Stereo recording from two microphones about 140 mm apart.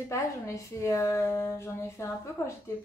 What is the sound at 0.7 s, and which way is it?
A woman's voice, 20° left (ahead or behind).